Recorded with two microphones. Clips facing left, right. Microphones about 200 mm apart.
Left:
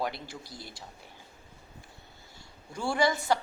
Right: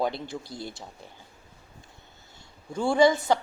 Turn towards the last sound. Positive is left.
turn(degrees=-20)  # may be behind; listen again after turning